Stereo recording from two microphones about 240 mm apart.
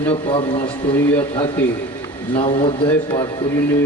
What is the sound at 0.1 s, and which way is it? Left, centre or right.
Speech, left.